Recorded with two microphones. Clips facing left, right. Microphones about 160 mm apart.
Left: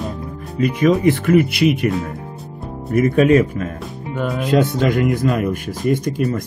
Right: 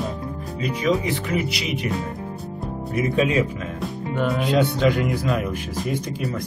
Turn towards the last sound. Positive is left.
turn(degrees=50)  # may be behind; listen again after turning